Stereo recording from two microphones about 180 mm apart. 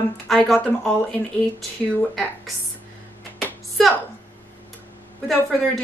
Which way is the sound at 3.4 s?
5° left (ahead or behind).